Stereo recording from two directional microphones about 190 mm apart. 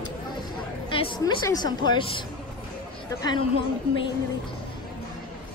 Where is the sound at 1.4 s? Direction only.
20° left (ahead or behind).